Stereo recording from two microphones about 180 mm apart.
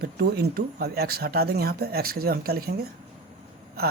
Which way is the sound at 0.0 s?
60° right (ahead or behind).